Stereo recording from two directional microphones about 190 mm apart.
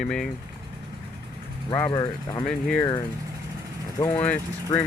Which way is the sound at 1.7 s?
15° left (ahead or behind).